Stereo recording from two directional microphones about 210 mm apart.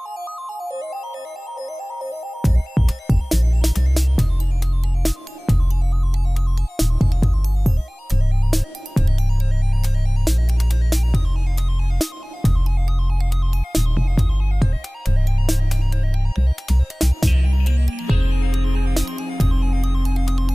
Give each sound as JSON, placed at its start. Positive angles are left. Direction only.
{"t": 2.4, "sound": "music", "side_deg": 0}
{"t": 6.8, "sound": "music", "side_deg": 0}
{"t": 10.3, "sound": "music", "side_deg": 0}
{"t": 13.7, "sound": "music", "side_deg": 0}